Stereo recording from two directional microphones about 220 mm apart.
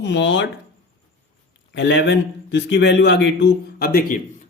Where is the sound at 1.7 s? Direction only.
55° left (ahead or behind).